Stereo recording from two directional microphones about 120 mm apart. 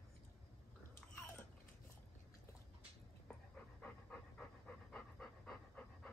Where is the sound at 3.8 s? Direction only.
10° left (ahead or behind).